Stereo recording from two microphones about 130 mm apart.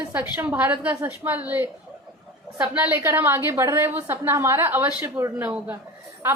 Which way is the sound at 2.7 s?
10° right (ahead or behind).